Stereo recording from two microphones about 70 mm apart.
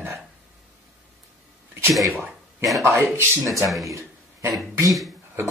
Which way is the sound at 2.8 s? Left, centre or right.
Right.